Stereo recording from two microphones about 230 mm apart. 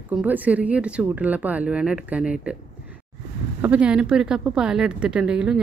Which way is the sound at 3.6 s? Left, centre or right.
Centre.